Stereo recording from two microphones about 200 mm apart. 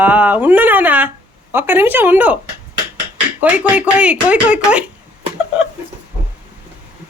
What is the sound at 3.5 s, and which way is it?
Speech, 5° right (ahead or behind).